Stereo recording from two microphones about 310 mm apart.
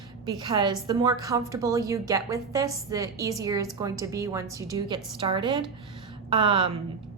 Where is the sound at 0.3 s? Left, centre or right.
Centre.